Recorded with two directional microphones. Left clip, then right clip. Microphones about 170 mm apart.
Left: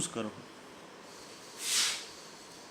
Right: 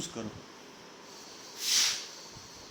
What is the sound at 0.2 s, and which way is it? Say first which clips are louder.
Speech: left 5 dB; 30° left (ahead or behind).